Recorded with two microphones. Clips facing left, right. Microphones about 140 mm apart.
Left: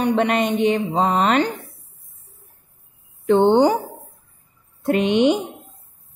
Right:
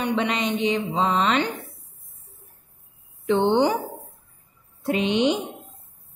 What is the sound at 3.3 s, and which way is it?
Speech, 45° left (ahead or behind).